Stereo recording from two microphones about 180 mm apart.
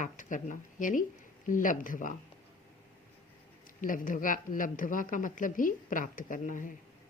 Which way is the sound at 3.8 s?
50° left (ahead or behind).